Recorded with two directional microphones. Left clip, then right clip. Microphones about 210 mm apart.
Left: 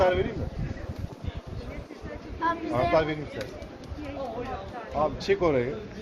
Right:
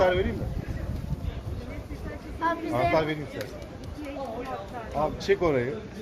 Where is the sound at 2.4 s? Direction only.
40° right (ahead or behind).